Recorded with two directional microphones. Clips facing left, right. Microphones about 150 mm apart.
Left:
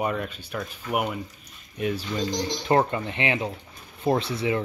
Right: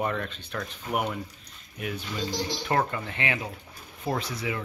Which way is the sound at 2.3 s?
20° left (ahead or behind).